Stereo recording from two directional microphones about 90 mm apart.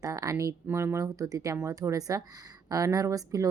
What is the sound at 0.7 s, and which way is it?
A woman's voice, 30° right (ahead or behind).